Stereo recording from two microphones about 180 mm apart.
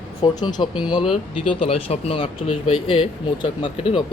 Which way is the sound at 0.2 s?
25° left (ahead or behind).